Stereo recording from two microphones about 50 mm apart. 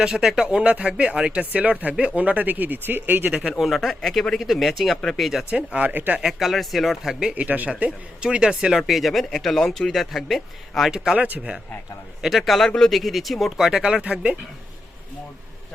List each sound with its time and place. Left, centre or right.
0.0 s speech: centre
0.6 s speech: right
3.8 s speech: centre
5.5 s speech: right
5.9 s speech: right
6.4 s speech: centre
7.3 s speech: right
7.8 s speech: centre
8.9 s speech: centre
10.9 s speech: centre
12.5 s speech: centre